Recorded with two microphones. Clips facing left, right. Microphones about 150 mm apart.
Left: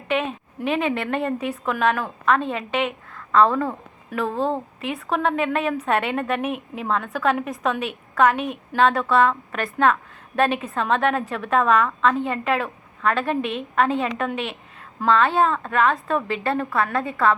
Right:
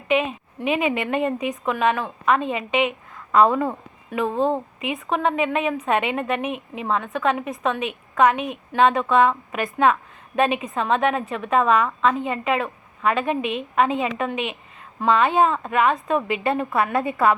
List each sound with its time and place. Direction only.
0.1 s a woman's voice: centre (ahead or behind)
3.2 s a sound: 15° right (ahead or behind)
3.5 s a woman's voice: 5° right (ahead or behind)
16.6 s a woman's voice: 20° right (ahead or behind)